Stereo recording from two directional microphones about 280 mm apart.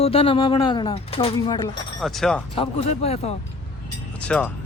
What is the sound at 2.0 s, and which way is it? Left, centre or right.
Speech, centre.